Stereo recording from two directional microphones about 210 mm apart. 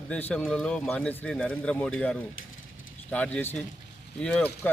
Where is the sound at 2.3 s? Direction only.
70° left (ahead or behind).